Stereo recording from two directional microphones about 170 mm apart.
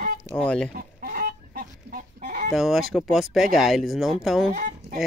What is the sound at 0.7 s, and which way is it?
Chicken, 55° right (ahead or behind).